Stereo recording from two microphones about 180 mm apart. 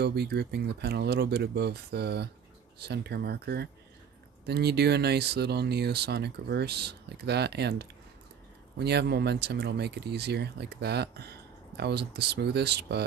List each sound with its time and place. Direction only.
0.0 s speech: 65° right (ahead or behind)